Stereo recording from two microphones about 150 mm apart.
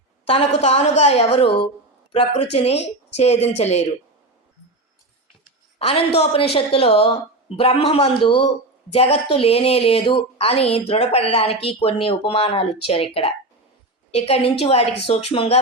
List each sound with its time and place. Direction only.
0.3 s speech: 40° left (ahead or behind)
5.8 s speech: 40° left (ahead or behind)